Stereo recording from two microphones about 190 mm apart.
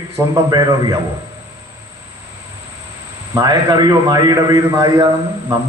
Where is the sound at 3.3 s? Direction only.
20° right (ahead or behind).